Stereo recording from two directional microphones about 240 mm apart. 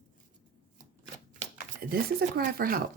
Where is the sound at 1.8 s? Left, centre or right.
Right.